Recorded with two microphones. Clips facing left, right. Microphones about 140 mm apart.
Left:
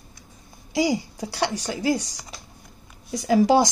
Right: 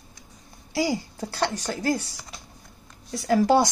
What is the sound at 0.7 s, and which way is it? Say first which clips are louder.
Speech: left 3 dB; 15° left (ahead or behind).